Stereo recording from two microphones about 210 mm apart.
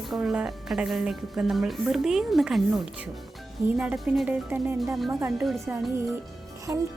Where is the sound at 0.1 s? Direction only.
Centre (ahead or behind).